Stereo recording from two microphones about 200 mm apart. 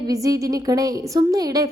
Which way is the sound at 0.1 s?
20° right (ahead or behind).